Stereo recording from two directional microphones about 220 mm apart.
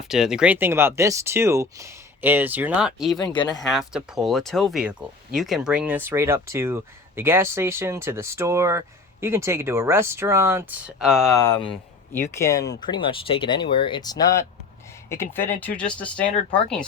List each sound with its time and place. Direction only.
0.0 s speech: centre (ahead or behind)
11.3 s speech: 10° left (ahead or behind)